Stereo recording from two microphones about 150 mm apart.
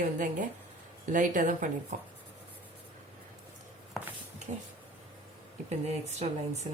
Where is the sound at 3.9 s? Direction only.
Centre (ahead or behind).